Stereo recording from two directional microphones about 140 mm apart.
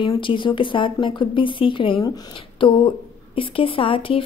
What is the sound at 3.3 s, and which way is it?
Speech, 40° left (ahead or behind).